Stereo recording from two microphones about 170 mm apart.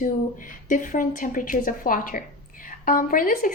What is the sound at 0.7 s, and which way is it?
A woman's voice, 50° left (ahead or behind).